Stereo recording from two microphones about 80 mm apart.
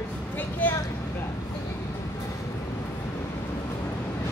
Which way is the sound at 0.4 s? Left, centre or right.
Left.